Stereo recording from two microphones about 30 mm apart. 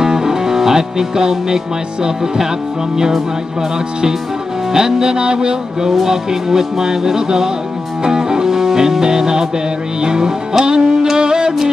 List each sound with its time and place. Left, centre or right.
0.0 s music: centre
4.7 s music: right
5.9 s music: centre